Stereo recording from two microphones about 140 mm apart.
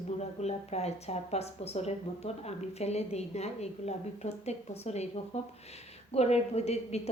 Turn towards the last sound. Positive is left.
turn(degrees=50)  # may be behind; listen again after turning